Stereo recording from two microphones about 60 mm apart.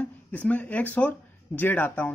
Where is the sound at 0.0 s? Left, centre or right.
Left.